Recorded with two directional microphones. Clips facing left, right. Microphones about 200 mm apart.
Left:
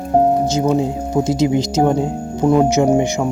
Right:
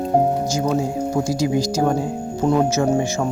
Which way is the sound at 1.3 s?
25° left (ahead or behind).